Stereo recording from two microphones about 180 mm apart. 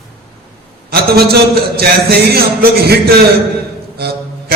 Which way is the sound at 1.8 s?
60° right (ahead or behind).